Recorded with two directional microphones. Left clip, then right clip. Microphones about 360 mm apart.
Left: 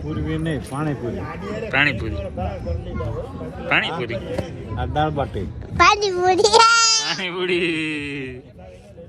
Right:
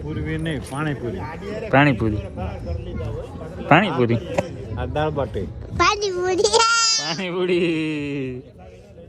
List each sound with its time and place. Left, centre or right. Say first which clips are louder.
0.1 s speech: left 2 dB; centre
1.7 s a man's voice: right 2 dB; right
3.7 s a man's voice: right 4 dB; right
4.8 s speech: left 1 dB; centre
5.7 s a child's voice: left 4 dB; centre
7.0 s speech: left 1 dB; centre